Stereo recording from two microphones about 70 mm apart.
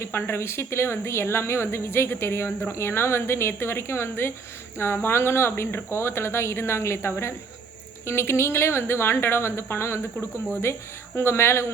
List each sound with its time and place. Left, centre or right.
0.1 s speech: left